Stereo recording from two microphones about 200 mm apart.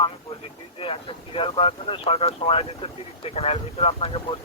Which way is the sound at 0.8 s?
25° left (ahead or behind).